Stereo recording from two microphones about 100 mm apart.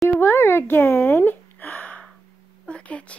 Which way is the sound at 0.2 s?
20° left (ahead or behind).